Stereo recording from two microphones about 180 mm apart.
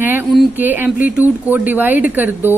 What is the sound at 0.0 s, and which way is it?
A woman's voice, 10° right (ahead or behind).